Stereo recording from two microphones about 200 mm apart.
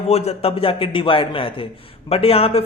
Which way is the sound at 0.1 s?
30° left (ahead or behind).